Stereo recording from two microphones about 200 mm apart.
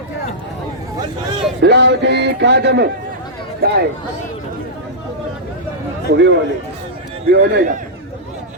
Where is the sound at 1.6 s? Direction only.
60° right (ahead or behind).